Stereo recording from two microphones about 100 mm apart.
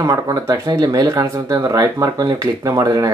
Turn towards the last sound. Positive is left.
turn(degrees=-35)  # may be behind; listen again after turning